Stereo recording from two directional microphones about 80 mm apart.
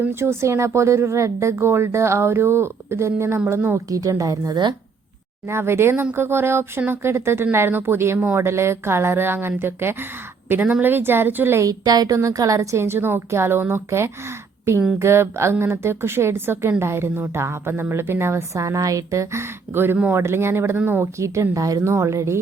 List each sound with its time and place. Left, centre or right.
0.0 s a woman's voice: right
3.8 s a woman's voice: right
5.5 s a woman's voice: right
11.6 s a woman's voice: right